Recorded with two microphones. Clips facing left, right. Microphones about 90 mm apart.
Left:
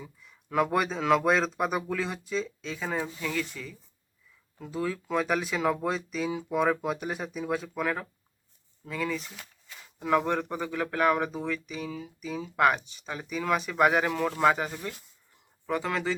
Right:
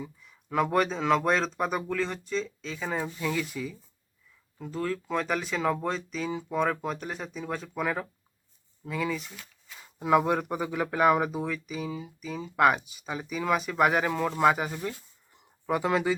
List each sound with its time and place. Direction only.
0.0 s speech: centre (ahead or behind)
4.5 s speech: 5° left (ahead or behind)
9.8 s speech: 10° right (ahead or behind)
15.6 s speech: 15° right (ahead or behind)